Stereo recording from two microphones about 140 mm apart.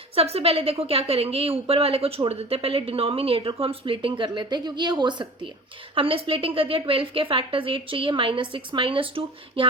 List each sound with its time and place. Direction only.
0.2 s a woman's voice: 45° right (ahead or behind)